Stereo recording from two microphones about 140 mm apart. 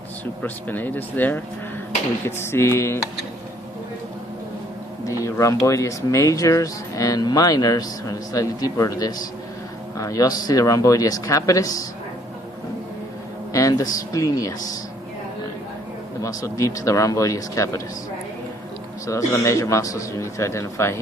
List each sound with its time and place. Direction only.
0.4 s speech: 15° left (ahead or behind)
5.2 s a sound: 20° left (ahead or behind)
5.6 s speech: 20° left (ahead or behind)
13.5 s speech: 25° left (ahead or behind)
16.2 s speech: 25° left (ahead or behind)
19.0 s speech: 20° left (ahead or behind)